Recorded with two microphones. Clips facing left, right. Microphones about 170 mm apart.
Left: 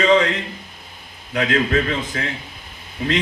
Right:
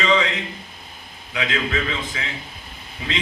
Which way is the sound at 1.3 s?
45° left (ahead or behind).